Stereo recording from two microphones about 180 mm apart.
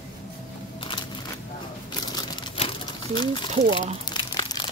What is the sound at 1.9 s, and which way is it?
Crumpling, 20° left (ahead or behind).